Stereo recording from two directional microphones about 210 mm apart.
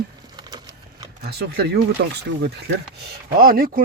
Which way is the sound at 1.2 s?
50° right (ahead or behind).